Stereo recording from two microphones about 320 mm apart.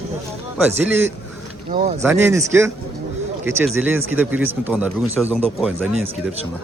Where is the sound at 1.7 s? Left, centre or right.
Right.